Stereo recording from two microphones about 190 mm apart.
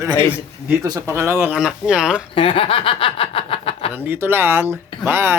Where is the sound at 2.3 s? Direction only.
30° left (ahead or behind).